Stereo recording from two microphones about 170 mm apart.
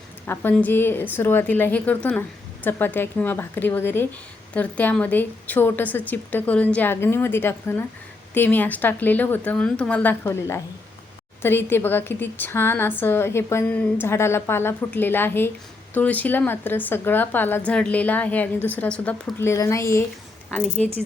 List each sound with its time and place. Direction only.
0.3 s a woman's voice: 10° left (ahead or behind)